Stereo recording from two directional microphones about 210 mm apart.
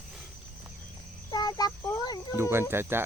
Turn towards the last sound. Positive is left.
turn(degrees=-10)  # may be behind; listen again after turning